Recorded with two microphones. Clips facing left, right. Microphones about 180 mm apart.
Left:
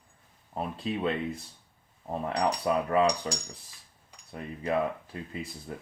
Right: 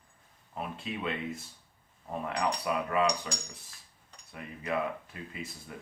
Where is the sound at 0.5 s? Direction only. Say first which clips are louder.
Left 4 dB; 35° left (ahead or behind).